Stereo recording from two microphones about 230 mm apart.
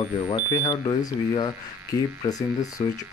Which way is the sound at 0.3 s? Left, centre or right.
Centre.